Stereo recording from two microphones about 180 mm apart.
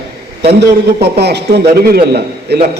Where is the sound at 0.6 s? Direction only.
65° right (ahead or behind).